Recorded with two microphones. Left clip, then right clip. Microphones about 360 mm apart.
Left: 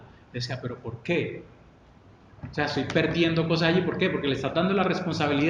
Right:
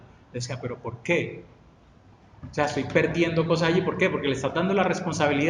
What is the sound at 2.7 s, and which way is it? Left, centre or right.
A man's voice, centre.